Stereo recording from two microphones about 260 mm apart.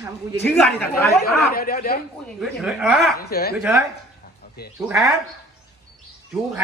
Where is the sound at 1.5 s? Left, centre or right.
Left.